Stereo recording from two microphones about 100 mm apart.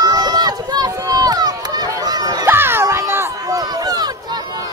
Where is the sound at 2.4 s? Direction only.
20° right (ahead or behind).